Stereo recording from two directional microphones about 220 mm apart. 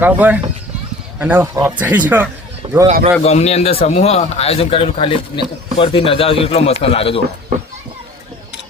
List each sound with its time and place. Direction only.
0.0 s speech: 5° right (ahead or behind)
2.8 s speech: 30° right (ahead or behind)
3.2 s speech: 30° left (ahead or behind)